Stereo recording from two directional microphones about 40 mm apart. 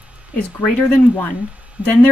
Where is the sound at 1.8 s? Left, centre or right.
Right.